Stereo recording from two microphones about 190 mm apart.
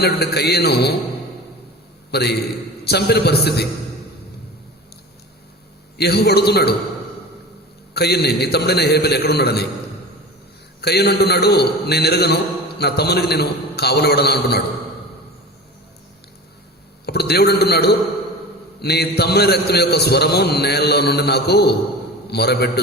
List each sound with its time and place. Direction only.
0.0 s a man's voice: 60° left (ahead or behind)
2.0 s a man's voice: 60° left (ahead or behind)
6.0 s a man's voice: 60° left (ahead or behind)
7.9 s a man's voice: 60° left (ahead or behind)
10.8 s a man's voice: 60° left (ahead or behind)
17.1 s a man's voice: 60° left (ahead or behind)